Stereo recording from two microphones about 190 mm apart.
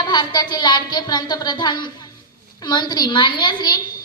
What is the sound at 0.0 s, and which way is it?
A woman's voice, 20° left (ahead or behind).